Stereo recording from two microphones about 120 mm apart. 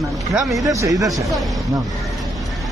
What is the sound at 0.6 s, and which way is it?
Speech, 30° right (ahead or behind).